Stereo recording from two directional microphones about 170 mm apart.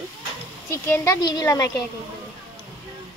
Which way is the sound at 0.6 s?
15° left (ahead or behind).